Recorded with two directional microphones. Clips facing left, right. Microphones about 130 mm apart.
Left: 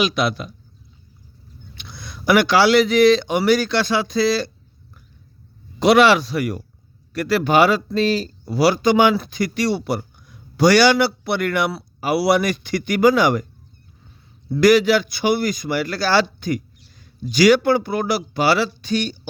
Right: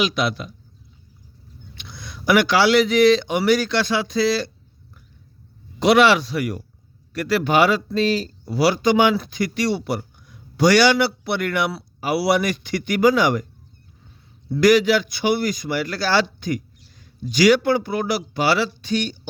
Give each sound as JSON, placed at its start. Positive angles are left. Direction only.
{"t": 0.0, "sound": "speech", "side_deg": 45}
{"t": 1.8, "sound": "speech", "side_deg": 40}
{"t": 5.8, "sound": "speech", "side_deg": 40}
{"t": 14.5, "sound": "speech", "side_deg": 40}